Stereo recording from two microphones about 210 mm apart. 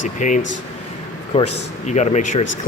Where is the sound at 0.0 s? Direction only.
35° left (ahead or behind).